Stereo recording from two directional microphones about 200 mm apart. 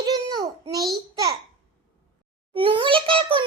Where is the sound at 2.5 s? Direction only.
25° right (ahead or behind).